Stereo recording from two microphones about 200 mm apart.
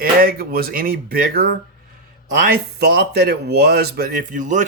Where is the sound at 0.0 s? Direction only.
45° right (ahead or behind).